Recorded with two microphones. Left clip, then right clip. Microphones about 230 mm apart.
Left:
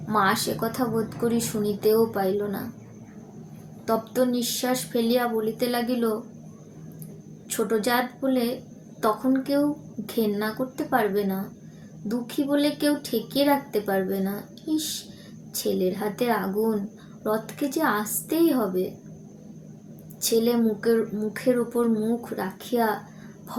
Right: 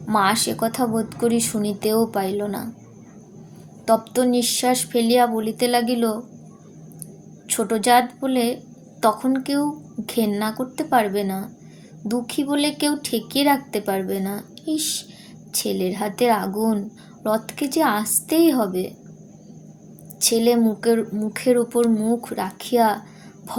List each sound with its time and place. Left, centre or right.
0.1 s a woman's voice: right
3.8 s a woman's voice: right
7.4 s a woman's voice: right
20.1 s a woman's voice: right